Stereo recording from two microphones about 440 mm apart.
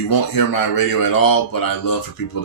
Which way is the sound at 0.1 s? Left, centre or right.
Left.